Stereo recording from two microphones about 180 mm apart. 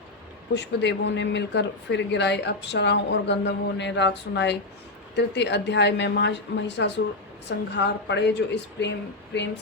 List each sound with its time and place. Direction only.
0.5 s speech: 75° left (ahead or behind)